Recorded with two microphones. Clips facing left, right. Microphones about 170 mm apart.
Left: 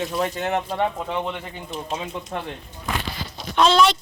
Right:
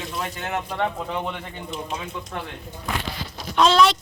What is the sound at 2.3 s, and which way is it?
Speech, 30° left (ahead or behind).